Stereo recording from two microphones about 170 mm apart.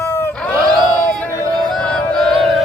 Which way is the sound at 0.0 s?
15° left (ahead or behind).